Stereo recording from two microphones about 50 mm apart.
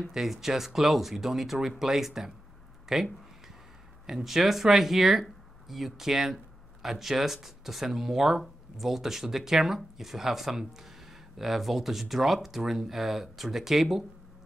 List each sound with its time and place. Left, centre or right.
0.1 s speech: centre